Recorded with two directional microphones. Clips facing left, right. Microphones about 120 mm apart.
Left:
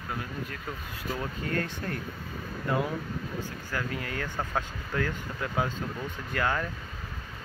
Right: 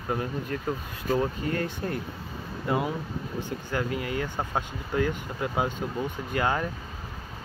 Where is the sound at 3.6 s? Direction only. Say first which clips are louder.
Right 5 dB; 20° right (ahead or behind).